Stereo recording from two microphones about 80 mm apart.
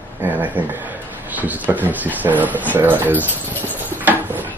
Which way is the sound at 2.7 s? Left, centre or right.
Right.